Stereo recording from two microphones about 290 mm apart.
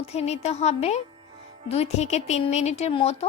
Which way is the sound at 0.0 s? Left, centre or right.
Left.